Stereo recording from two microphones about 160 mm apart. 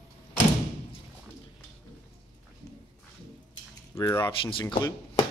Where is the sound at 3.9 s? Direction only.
25° left (ahead or behind).